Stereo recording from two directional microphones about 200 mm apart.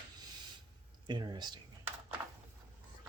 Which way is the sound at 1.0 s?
20° right (ahead or behind).